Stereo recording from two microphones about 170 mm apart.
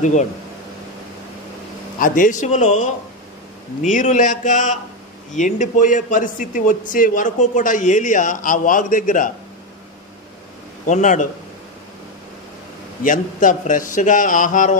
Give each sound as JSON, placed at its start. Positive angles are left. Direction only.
{"t": 0.0, "sound": "a man's voice", "side_deg": 45}
{"t": 2.0, "sound": "a man's voice", "side_deg": 55}
{"t": 10.9, "sound": "a man's voice", "side_deg": 45}
{"t": 13.0, "sound": "a man's voice", "side_deg": 50}